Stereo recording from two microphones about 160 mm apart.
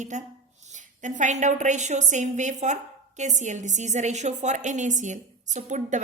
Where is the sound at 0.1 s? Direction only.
50° right (ahead or behind).